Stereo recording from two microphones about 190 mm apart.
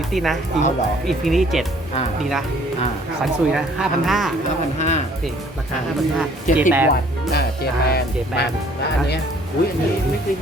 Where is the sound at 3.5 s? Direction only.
Centre (ahead or behind).